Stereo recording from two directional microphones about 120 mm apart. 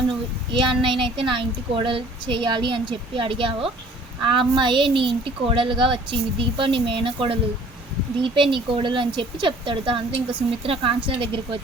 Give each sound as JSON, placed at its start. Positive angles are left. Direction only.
{"t": 0.5, "sound": "speech", "side_deg": -45}